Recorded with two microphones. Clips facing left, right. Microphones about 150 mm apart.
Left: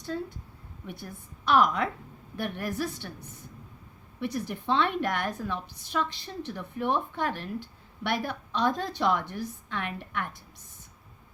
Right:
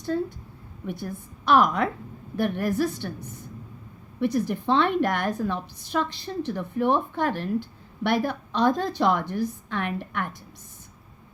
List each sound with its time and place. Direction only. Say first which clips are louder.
0.9 s a woman's voice: right 8 dB; 45° right (ahead or behind)
4.2 s a woman's voice: right 8 dB; 40° right (ahead or behind)